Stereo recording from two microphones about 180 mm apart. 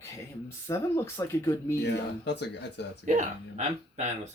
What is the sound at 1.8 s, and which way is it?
Speech, 70° left (ahead or behind).